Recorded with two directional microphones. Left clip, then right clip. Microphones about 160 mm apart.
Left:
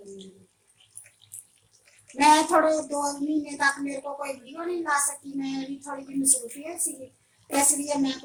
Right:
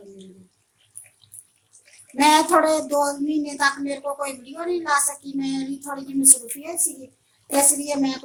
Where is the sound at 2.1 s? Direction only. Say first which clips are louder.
Right 3 dB; 50° right (ahead or behind).